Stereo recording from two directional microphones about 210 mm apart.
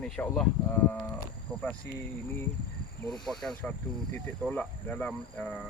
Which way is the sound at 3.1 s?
Centre (ahead or behind).